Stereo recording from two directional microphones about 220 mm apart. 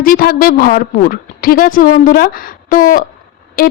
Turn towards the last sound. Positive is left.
turn(degrees=40)  # may be behind; listen again after turning